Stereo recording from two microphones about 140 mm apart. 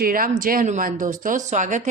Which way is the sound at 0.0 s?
80° right.